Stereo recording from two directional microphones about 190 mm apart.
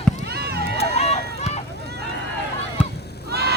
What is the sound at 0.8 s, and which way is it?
Run, 35° left (ahead or behind).